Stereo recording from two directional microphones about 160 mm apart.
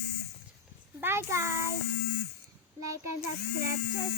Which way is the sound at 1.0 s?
15° right (ahead or behind).